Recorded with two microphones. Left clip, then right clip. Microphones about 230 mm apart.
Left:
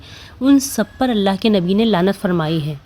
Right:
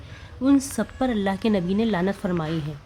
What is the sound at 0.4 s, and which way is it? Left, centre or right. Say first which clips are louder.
A woman's voice: left 6 dB; centre.